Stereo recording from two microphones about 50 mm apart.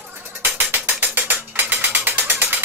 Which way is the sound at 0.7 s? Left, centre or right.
Right.